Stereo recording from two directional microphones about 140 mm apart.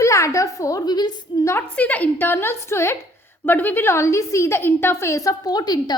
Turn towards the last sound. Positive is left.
turn(degrees=30)  # may be behind; listen again after turning